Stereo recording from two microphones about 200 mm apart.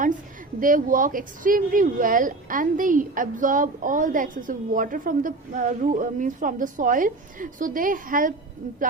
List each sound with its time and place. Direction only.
0.6 s speech: 40° right (ahead or behind)